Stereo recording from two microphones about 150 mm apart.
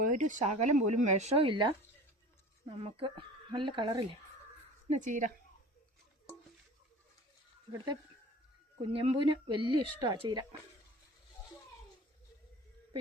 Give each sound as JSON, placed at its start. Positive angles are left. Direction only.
{"t": 0.0, "sound": "speech", "side_deg": -60}
{"t": 4.9, "sound": "a woman's voice", "side_deg": -55}
{"t": 8.8, "sound": "speech", "side_deg": -35}